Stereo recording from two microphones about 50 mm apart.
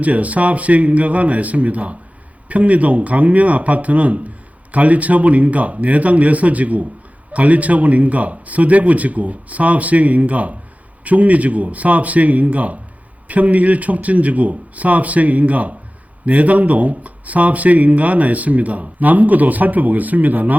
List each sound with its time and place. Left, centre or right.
0.0 s speech: right